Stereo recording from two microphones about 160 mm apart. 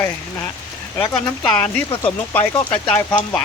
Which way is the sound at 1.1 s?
10° left (ahead or behind).